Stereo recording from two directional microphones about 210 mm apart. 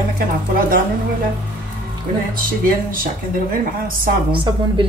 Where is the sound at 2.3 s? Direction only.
40° right (ahead or behind).